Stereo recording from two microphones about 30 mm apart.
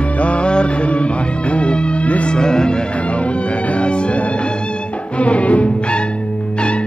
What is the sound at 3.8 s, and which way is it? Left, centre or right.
Music, left.